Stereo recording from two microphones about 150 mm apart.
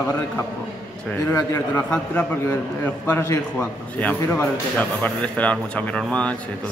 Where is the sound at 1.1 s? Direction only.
20° left (ahead or behind).